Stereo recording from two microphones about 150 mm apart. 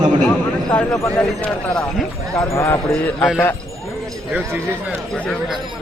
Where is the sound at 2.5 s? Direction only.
15° left (ahead or behind).